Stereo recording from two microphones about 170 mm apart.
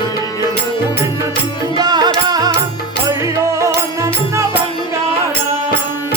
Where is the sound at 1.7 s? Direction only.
25° right (ahead or behind).